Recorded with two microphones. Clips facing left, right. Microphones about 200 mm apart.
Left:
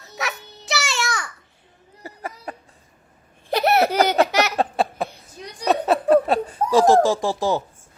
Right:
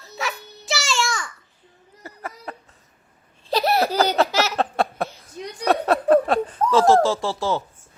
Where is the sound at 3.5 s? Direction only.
65° left (ahead or behind).